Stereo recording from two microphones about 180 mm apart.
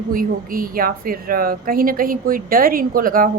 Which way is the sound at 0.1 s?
50° right (ahead or behind).